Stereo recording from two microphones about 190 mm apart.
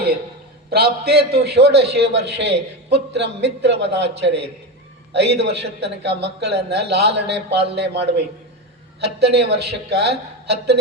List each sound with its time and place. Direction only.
0.7 s a man's voice: 55° right (ahead or behind)